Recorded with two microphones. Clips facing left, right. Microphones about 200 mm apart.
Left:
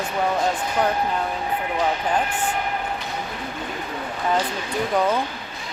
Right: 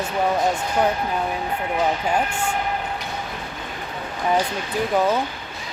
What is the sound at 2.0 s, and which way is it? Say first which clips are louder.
Speech: right 1 dB; 10° right (ahead or behind).